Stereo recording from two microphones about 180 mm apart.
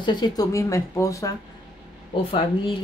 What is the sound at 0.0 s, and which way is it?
Speech, 25° left (ahead or behind).